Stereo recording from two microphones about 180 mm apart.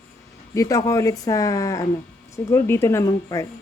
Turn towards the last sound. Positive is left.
turn(degrees=15)  # may be behind; listen again after turning